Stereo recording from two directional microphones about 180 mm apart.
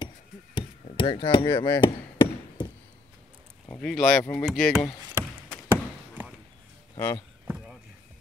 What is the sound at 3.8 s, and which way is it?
Speech, centre (ahead or behind).